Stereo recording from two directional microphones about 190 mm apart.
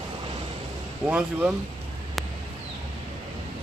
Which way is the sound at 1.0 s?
5° right (ahead or behind).